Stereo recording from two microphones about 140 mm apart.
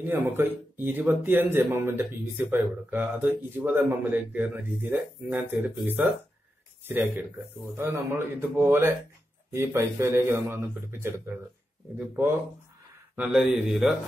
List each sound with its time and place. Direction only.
0.0 s speech: 15° right (ahead or behind)
6.9 s speech: 15° right (ahead or behind)
13.1 s speech: 5° right (ahead or behind)